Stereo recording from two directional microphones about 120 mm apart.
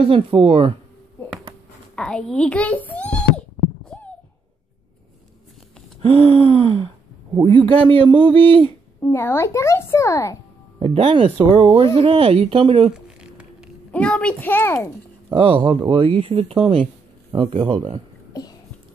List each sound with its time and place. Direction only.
0.0 s speech: 50° right (ahead or behind)
2.0 s a child's voice: 5° left (ahead or behind)
5.9 s speech: 55° right (ahead or behind)
9.0 s a child's voice: 20° left (ahead or behind)
11.0 s speech: 50° right (ahead or behind)
13.2 s music: 5° right (ahead or behind)
13.9 s a child's voice: 10° left (ahead or behind)
15.3 s speech: 50° right (ahead or behind)
18.3 s a sound: 30° left (ahead or behind)